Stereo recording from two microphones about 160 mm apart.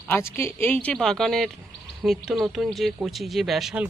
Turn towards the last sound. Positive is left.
turn(degrees=0)  # may be behind; listen again after turning